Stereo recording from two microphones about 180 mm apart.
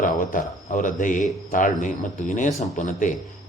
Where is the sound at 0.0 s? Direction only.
45° left (ahead or behind).